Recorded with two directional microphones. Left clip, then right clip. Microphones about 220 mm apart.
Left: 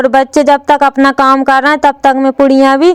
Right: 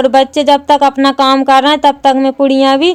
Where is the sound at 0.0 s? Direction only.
25° left (ahead or behind).